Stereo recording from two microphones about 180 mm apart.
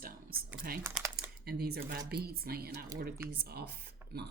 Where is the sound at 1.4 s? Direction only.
60° right (ahead or behind).